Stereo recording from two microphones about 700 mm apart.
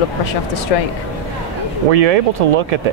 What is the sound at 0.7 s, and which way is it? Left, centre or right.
Speech, left.